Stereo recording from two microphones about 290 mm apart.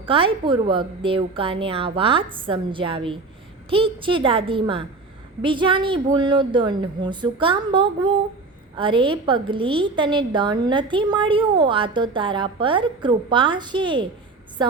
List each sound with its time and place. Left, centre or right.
0.0 s a woman's voice: centre